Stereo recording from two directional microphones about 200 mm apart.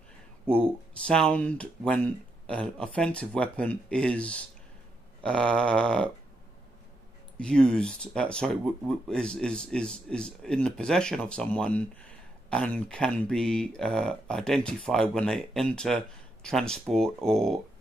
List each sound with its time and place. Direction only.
0.5 s speech: 5° left (ahead or behind)
7.3 s speech: 5° left (ahead or behind)